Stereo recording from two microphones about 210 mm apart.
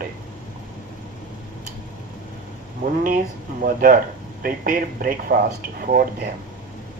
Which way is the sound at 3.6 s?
40° right (ahead or behind).